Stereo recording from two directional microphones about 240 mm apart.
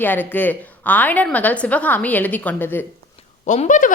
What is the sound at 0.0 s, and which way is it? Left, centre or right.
A woman's voice, centre.